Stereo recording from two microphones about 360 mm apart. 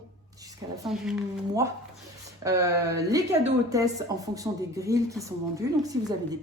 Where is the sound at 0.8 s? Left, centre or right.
Centre.